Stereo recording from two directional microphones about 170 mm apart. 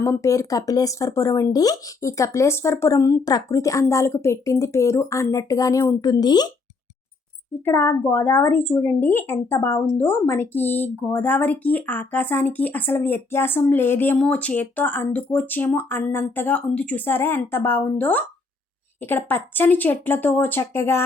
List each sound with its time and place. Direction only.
0.0 s speech: 15° left (ahead or behind)
7.5 s speech: 10° left (ahead or behind)